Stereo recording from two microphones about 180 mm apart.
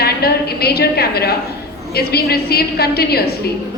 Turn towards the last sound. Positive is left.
turn(degrees=60)  # may be behind; listen again after turning